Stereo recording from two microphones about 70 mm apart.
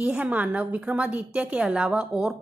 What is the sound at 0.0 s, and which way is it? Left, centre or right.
A woman's voice, centre.